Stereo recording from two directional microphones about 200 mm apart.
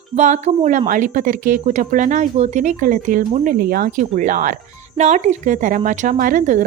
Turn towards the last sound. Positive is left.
turn(degrees=-40)  # may be behind; listen again after turning